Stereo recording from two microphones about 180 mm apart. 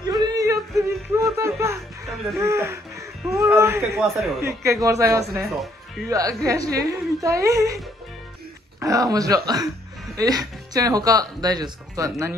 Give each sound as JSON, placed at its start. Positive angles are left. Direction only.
{"t": 0.2, "sound": "music", "side_deg": -20}
{"t": 2.3, "sound": "a woman's voice", "side_deg": -15}
{"t": 5.4, "sound": "speech", "side_deg": 0}
{"t": 6.0, "sound": "a woman's voice", "side_deg": -20}
{"t": 8.7, "sound": "speech", "side_deg": -20}